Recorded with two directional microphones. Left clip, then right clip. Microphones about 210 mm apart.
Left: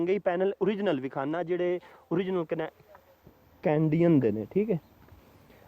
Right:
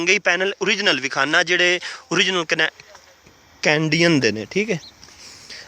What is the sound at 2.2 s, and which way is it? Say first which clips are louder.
Speech: right 14 dB; centre (ahead or behind).